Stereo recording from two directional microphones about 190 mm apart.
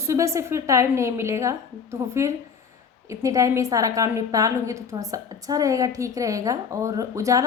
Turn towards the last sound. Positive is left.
turn(degrees=-15)  # may be behind; listen again after turning